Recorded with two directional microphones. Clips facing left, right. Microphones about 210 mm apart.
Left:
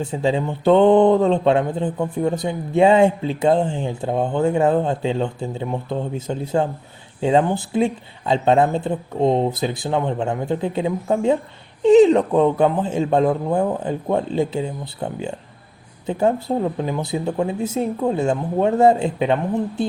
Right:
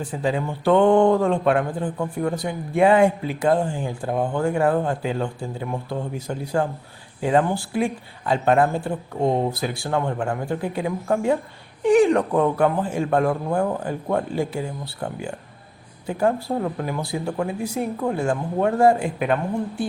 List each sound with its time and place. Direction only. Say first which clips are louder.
0.0 s speech: left 3 dB; 25° left (ahead or behind)